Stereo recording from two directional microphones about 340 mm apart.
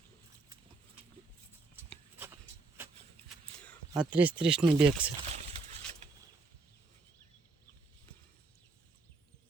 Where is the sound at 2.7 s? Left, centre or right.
Centre.